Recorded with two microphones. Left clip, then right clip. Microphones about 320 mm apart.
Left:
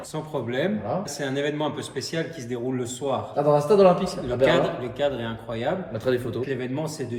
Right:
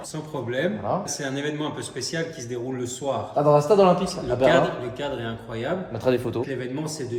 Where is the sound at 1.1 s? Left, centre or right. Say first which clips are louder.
Left 2 dB; centre.